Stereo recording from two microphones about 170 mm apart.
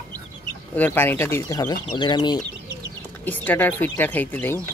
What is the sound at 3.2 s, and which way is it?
Speech, 10° left (ahead or behind).